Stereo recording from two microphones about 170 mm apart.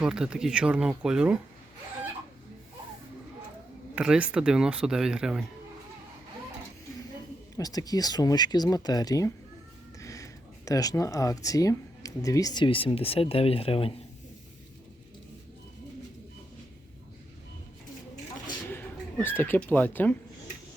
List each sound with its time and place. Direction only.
0.0 s speech: 5° right (ahead or behind)
3.9 s speech: 5° right (ahead or behind)
7.5 s speech: 20° left (ahead or behind)
10.0 s a sound: 20° left (ahead or behind)
10.7 s speech: 20° left (ahead or behind)
18.7 s speech: 10° left (ahead or behind)